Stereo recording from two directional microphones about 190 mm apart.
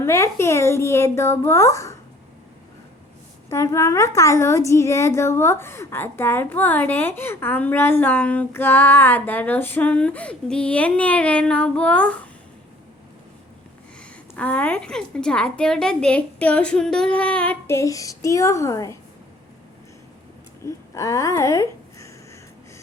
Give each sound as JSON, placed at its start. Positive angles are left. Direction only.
{"t": 0.0, "sound": "a woman's voice", "side_deg": 15}
{"t": 3.5, "sound": "a woman's voice", "side_deg": 15}
{"t": 14.0, "sound": "a woman's voice", "side_deg": 5}
{"t": 20.7, "sound": "speech", "side_deg": 15}